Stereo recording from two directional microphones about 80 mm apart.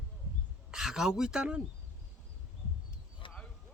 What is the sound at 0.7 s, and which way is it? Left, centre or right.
Speech, centre.